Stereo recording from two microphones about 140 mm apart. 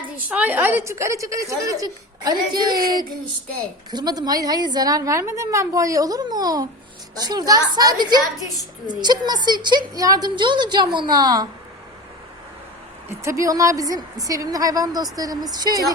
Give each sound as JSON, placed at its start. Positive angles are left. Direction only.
{"t": 0.2, "sound": "a woman's voice", "side_deg": -10}
{"t": 3.9, "sound": "a woman's voice", "side_deg": -30}
{"t": 13.2, "sound": "a woman's voice", "side_deg": -20}